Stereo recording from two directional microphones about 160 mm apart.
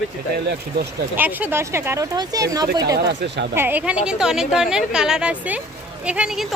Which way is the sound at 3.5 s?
10° right (ahead or behind).